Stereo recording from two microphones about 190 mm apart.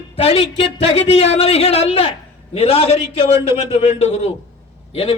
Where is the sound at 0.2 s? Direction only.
30° left (ahead or behind).